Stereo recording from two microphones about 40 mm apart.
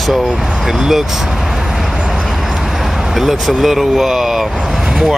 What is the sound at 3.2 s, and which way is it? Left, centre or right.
Speech, centre.